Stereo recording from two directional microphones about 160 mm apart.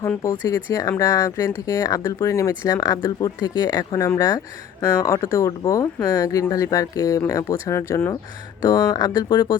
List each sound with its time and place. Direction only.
0.0 s speech: 20° left (ahead or behind)